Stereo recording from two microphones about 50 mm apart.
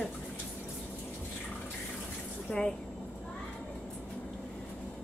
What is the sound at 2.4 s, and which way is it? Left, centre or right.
Speech, centre.